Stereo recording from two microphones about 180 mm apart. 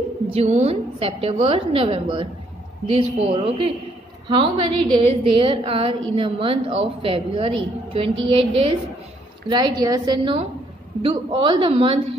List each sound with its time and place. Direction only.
0.3 s a woman's voice: 35° right (ahead or behind)